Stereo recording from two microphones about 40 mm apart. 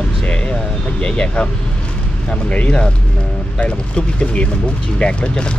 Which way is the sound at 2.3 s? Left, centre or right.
Left.